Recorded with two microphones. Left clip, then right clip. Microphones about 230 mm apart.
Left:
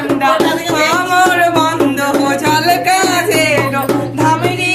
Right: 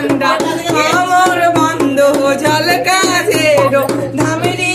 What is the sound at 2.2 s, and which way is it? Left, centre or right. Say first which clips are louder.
Music: even; centre.